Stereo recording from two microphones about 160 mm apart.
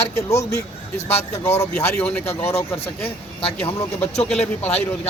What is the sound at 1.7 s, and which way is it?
Speech, 10° left (ahead or behind).